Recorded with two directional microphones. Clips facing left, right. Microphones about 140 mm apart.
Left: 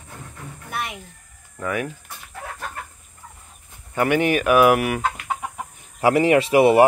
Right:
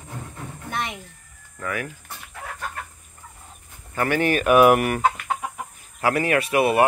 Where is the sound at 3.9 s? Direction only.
15° left (ahead or behind).